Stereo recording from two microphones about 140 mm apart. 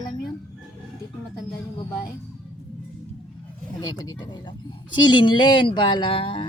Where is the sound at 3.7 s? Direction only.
30° left (ahead or behind).